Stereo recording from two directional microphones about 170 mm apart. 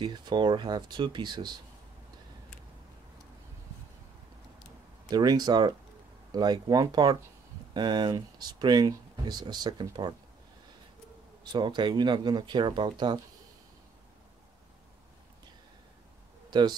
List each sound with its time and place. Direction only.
0.0 s speech: 25° right (ahead or behind)
5.1 s speech: 25° right (ahead or behind)
11.5 s speech: 25° right (ahead or behind)
16.4 s a sound: 25° right (ahead or behind)